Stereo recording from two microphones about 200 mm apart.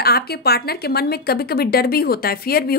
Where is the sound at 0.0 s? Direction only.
50° left (ahead or behind).